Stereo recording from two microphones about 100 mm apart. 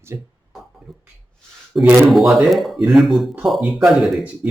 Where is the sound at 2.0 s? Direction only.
Centre (ahead or behind).